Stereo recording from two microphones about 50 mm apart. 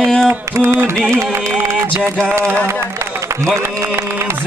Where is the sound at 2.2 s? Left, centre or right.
Right.